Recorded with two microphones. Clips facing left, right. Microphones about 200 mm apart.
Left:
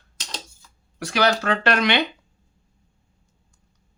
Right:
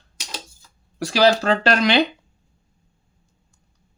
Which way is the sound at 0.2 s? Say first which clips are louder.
Right 1 dB; 10° right (ahead or behind).